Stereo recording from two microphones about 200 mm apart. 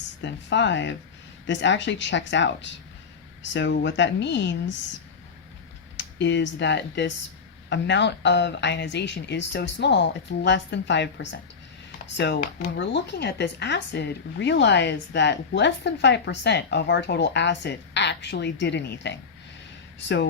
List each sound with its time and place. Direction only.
0.2 s speech: 60° left (ahead or behind)
6.0 s speech: 65° left (ahead or behind)